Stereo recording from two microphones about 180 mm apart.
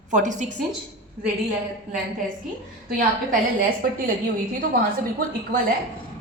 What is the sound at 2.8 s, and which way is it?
Speech, 45° right (ahead or behind).